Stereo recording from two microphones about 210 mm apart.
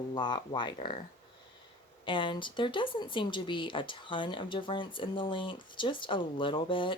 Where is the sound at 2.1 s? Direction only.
25° left (ahead or behind).